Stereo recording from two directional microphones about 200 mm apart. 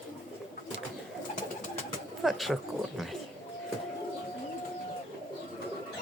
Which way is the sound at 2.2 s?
Centre (ahead or behind).